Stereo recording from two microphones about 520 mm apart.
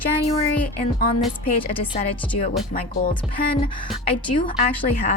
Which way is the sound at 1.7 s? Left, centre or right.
Centre.